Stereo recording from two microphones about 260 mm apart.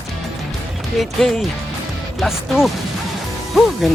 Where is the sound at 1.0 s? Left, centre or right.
Centre.